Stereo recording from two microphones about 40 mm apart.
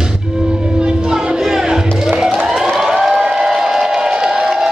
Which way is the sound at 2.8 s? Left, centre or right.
Centre.